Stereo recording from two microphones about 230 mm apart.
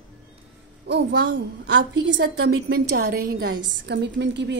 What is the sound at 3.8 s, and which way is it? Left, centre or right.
Speech, right.